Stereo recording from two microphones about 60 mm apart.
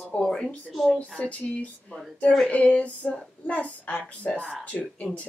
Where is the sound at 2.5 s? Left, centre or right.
Left.